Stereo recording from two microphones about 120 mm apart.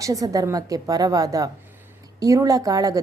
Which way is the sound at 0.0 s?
30° right (ahead or behind).